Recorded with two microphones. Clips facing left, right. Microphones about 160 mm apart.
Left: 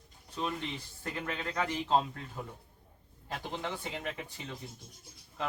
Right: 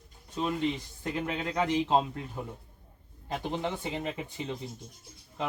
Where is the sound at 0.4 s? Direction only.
20° right (ahead or behind).